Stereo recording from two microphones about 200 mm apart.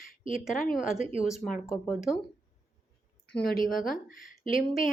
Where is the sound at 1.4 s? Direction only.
5° left (ahead or behind).